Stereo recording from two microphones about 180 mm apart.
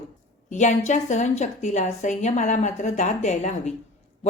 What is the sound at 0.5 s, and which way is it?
A woman's voice, 45° left (ahead or behind).